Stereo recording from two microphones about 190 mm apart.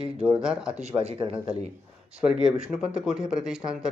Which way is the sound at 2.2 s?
5° right (ahead or behind).